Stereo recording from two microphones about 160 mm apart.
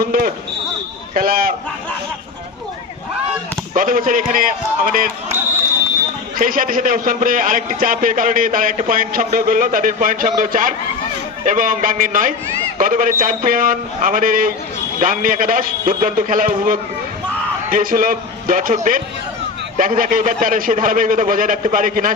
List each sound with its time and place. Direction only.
0.0 s basketball bounce: 60° right (ahead or behind)
1.1 s a sound: 65° right (ahead or behind)
3.8 s a man's voice: 55° right (ahead or behind)
6.4 s a man's voice: 60° right (ahead or behind)